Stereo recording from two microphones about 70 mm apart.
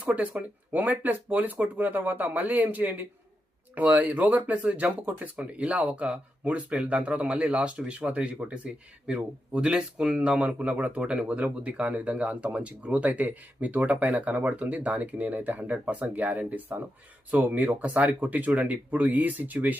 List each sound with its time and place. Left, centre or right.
0.0 s speech: right